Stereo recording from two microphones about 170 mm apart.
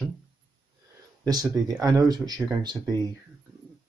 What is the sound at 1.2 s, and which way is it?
Speech, 20° right (ahead or behind).